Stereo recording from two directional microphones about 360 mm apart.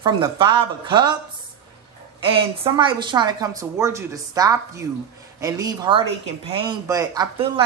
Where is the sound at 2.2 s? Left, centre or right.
Centre.